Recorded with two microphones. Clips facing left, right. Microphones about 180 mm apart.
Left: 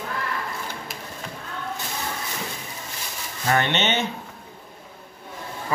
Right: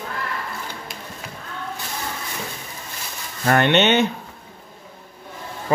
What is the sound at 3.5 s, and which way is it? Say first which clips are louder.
Speech: right 6 dB; 60° right (ahead or behind).